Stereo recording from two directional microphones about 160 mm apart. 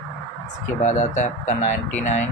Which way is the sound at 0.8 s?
45° left (ahead or behind).